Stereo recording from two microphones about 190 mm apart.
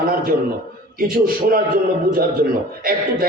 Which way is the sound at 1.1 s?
50° right (ahead or behind).